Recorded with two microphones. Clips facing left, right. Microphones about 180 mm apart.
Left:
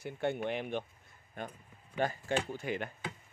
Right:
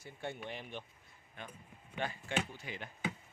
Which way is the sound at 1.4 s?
45° left (ahead or behind).